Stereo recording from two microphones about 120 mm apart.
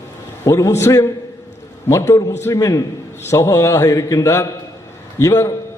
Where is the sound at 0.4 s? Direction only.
25° left (ahead or behind).